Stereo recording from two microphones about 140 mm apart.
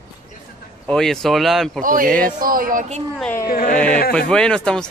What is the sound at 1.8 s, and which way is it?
Speech, 80° right.